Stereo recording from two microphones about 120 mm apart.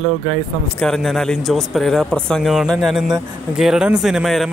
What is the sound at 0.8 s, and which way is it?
A man's voice, 5° left (ahead or behind).